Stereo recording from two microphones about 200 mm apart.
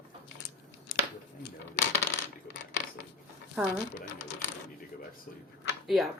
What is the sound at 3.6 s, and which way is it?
Speech, 5° right (ahead or behind).